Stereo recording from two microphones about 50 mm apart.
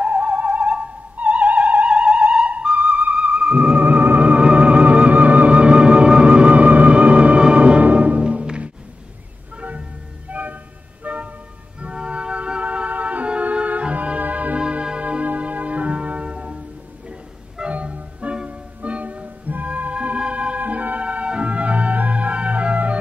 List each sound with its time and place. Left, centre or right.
0.0 s music: right
3.7 s music: right
10.3 s a sound: right
11.1 s music: right
14.6 s music: centre